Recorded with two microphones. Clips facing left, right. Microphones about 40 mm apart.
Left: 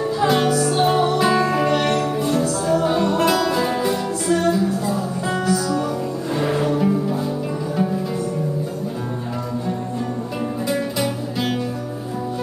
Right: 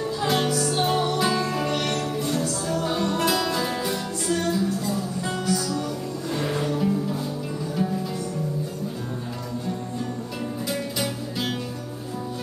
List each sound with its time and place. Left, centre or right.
0.0 s music: centre
10.7 s music: centre